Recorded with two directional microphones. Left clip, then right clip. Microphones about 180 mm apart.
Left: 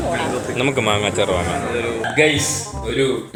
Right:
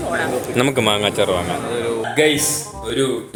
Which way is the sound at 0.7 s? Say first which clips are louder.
Right 1 dB; 25° right (ahead or behind).